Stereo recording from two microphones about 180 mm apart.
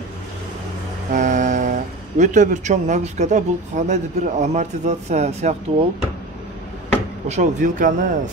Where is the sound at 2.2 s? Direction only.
40° right (ahead or behind).